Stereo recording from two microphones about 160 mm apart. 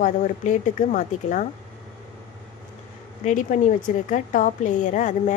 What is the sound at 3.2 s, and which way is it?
A woman's voice, 50° left (ahead or behind).